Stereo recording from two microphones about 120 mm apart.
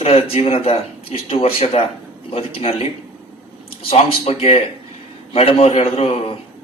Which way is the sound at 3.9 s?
55° left (ahead or behind).